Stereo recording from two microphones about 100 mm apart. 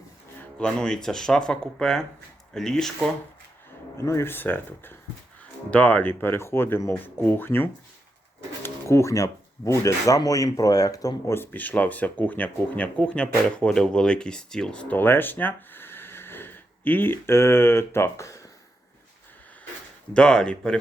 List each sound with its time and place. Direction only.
0.3 s speech: 10° left (ahead or behind)
4.0 s speech: 25° left (ahead or behind)
11.3 s speech: 15° left (ahead or behind)
20.1 s speech: 10° left (ahead or behind)